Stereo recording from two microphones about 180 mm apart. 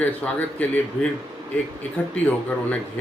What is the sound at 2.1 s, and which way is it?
Speech, 10° left (ahead or behind).